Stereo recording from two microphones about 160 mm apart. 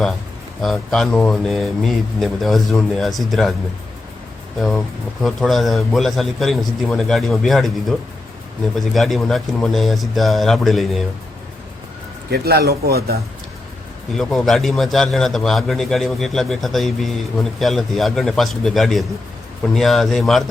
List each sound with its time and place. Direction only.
0.6 s a man's voice: centre (ahead or behind)
5.2 s a man's voice: centre (ahead or behind)
12.3 s speech: 90° right
14.2 s a man's voice: centre (ahead or behind)